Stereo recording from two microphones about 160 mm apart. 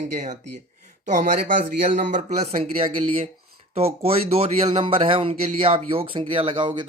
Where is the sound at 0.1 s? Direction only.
50° right (ahead or behind).